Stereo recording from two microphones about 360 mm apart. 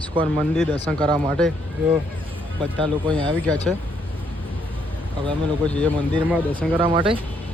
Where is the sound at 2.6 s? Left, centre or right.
Centre.